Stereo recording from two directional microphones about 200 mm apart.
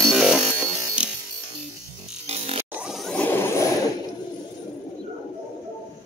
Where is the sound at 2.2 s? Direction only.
30° right (ahead or behind).